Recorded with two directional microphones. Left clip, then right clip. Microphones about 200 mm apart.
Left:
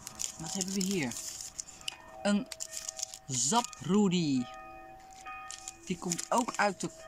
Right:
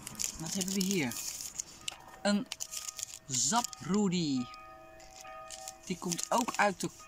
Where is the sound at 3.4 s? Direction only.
10° left (ahead or behind).